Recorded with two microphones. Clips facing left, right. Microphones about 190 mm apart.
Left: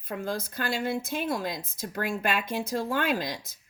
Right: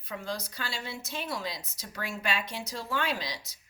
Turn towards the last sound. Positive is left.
turn(degrees=50)  # may be behind; listen again after turning